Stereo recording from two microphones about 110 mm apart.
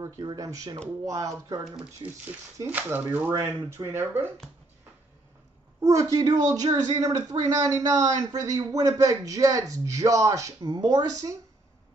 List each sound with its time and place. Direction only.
0.0 s a man's voice: 35° right (ahead or behind)
2.0 s speech: 45° right (ahead or behind)
2.6 s speech: 15° right (ahead or behind)
5.8 s a man's voice: 30° right (ahead or behind)